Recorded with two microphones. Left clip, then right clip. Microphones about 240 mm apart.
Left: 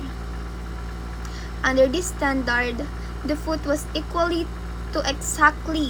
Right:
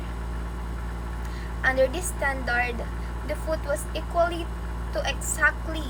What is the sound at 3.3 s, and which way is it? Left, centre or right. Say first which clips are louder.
A woman's voice: left 4 dB; left.